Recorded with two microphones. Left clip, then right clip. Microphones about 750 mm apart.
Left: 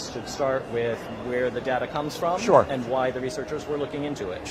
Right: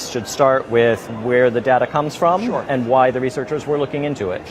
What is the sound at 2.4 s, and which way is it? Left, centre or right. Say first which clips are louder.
Speech: left 3 dB; left.